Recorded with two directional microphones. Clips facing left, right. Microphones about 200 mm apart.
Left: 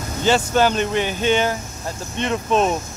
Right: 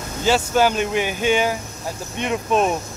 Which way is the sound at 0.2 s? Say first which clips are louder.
Even; 5° right (ahead or behind).